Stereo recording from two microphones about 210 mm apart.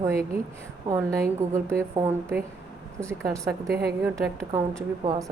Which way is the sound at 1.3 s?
10° right (ahead or behind).